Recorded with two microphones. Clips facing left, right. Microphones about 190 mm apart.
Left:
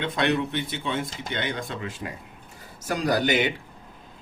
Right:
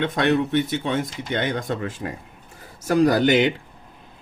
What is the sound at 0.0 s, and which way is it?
Speech, 45° right (ahead or behind).